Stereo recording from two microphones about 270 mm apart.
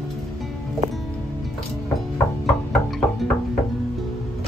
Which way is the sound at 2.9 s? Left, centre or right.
Centre.